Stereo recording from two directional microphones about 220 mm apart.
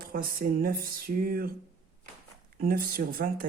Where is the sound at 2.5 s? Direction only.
40° right (ahead or behind).